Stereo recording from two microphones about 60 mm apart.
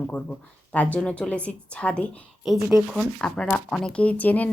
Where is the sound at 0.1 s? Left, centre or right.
Left.